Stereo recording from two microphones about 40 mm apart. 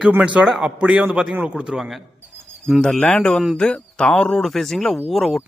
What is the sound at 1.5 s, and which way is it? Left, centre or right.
Speech, right.